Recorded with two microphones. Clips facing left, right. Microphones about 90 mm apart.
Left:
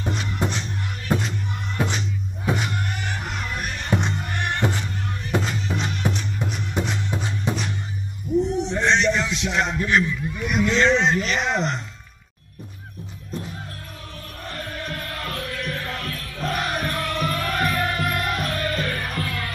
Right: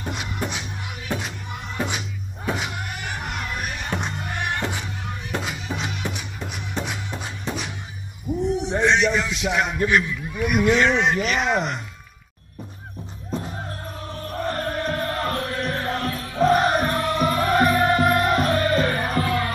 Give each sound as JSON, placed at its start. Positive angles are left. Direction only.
{"t": 0.1, "sound": "music", "side_deg": -5}
{"t": 9.8, "sound": "a man's voice", "side_deg": -5}
{"t": 14.4, "sound": "music", "side_deg": -40}